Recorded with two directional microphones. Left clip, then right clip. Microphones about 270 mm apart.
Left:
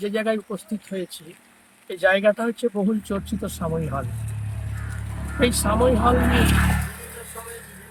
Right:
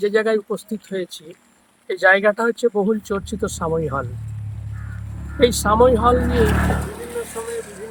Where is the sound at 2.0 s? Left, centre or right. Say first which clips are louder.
Right 4 dB; right.